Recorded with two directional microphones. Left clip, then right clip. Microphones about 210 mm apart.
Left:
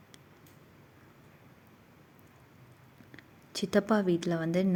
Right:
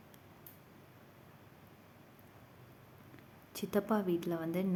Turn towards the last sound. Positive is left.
turn(degrees=25)  # may be behind; listen again after turning